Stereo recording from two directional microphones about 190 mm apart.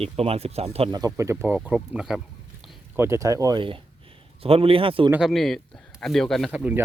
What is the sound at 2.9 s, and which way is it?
Speech, 15° right (ahead or behind).